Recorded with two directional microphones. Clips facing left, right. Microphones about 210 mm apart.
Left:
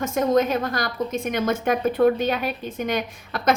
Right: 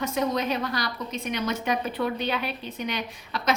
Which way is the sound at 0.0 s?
50° left (ahead or behind).